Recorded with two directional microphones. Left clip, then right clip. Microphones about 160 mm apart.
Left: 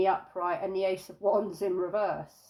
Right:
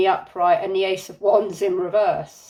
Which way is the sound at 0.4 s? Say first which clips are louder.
Right 12 dB; 15° left (ahead or behind).